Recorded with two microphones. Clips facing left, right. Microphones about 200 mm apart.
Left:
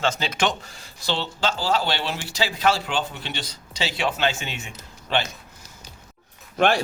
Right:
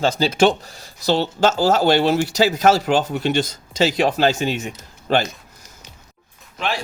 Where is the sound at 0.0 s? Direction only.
35° right (ahead or behind).